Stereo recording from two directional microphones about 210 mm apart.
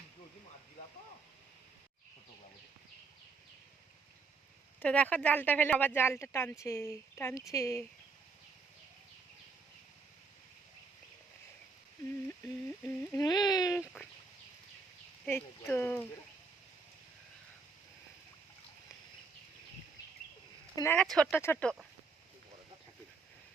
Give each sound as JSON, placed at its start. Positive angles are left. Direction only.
{"t": 4.8, "sound": "speech", "side_deg": 5}
{"t": 12.6, "sound": "speech", "side_deg": 10}
{"t": 15.3, "sound": "speech", "side_deg": 10}
{"t": 20.7, "sound": "speech", "side_deg": 10}